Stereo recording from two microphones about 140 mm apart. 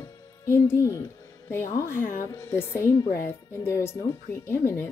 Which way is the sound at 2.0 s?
75° left (ahead or behind).